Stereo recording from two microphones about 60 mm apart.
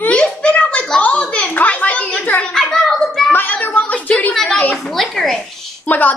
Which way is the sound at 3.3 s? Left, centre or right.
Left.